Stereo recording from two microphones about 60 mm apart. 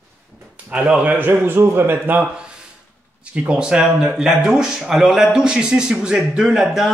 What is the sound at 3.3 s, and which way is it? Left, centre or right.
Speech, centre.